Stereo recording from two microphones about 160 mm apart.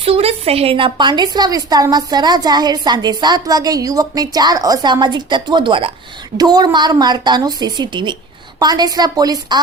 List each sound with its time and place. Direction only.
0.0 s a woman's voice: 40° right (ahead or behind)